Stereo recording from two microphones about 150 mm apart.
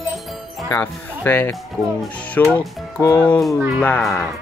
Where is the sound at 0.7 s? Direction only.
15° left (ahead or behind).